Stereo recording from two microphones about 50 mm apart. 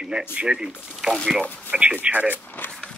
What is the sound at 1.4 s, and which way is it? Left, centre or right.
Speech, left.